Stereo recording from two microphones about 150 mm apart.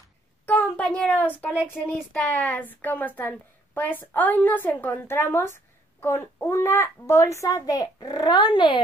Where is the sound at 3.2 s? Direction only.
10° left (ahead or behind).